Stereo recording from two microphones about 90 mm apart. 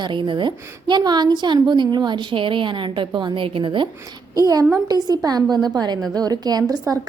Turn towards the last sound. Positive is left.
turn(degrees=-45)  # may be behind; listen again after turning